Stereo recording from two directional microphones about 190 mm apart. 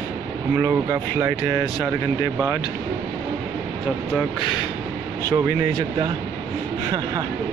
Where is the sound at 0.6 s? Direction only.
15° right (ahead or behind).